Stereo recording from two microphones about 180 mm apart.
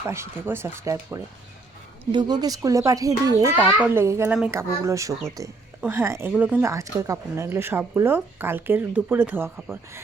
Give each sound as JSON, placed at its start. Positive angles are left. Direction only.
{"t": 0.1, "sound": "speech", "side_deg": -15}